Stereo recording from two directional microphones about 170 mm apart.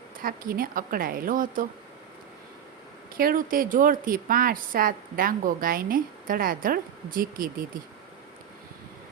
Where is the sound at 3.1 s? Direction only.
55° right (ahead or behind).